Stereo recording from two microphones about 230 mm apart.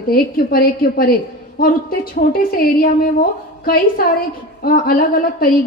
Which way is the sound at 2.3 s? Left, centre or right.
Left.